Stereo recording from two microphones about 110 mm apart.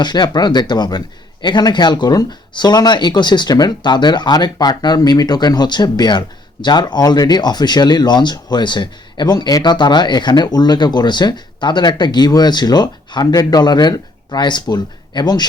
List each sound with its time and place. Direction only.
0.0 s speech: 40° left (ahead or behind)